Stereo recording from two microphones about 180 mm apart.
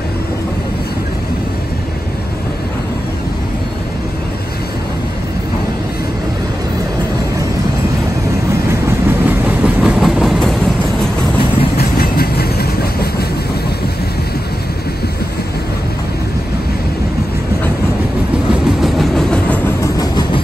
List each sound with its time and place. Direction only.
8.6 s train: 15° right (ahead or behind)
11.7 s train: 60° left (ahead or behind)
18.5 s train: centre (ahead or behind)
19.8 s train: 20° left (ahead or behind)